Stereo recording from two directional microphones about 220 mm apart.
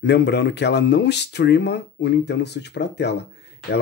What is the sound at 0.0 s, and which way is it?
Speech, 50° left (ahead or behind).